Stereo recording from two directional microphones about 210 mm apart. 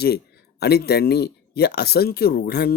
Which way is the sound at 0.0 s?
50° left (ahead or behind).